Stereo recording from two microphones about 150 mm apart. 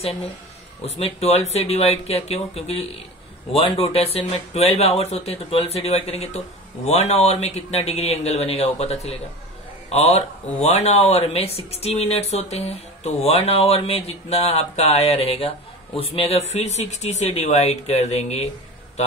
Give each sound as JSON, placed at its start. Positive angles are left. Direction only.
{"t": 0.8, "sound": "speech", "side_deg": 40}